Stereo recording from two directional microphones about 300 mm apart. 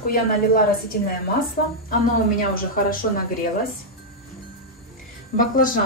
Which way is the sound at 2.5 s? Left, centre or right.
Left.